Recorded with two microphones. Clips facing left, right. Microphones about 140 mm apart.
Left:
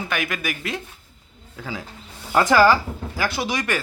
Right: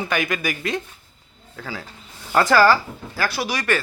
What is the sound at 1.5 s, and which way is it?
Speech, 15° left (ahead or behind).